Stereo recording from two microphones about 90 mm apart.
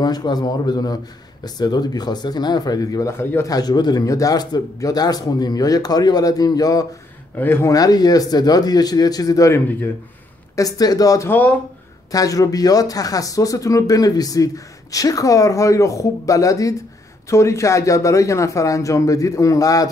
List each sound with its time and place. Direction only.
0.0 s speech: 50° left (ahead or behind); by 3.4 s 25° left (ahead or behind)
3.4 s speech: 45° left (ahead or behind)
7.3 s speech: 25° left (ahead or behind)
7.7 s speech: 45° left (ahead or behind)
11.2 s speech: 20° left (ahead or behind)
12.1 s speech: 40° left (ahead or behind)